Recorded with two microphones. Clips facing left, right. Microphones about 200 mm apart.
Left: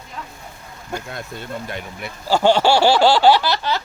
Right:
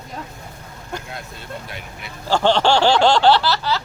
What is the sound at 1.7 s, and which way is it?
Speech, 50° left (ahead or behind).